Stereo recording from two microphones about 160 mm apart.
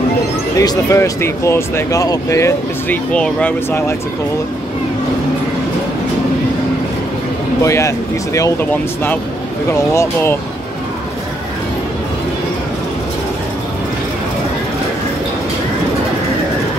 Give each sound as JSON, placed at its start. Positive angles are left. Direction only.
{"t": 0.6, "sound": "speech", "side_deg": 20}
{"t": 3.1, "sound": "speech", "side_deg": 5}
{"t": 7.6, "sound": "speech", "side_deg": 20}